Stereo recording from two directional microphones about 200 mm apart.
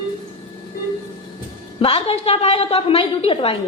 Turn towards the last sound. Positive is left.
turn(degrees=25)  # may be behind; listen again after turning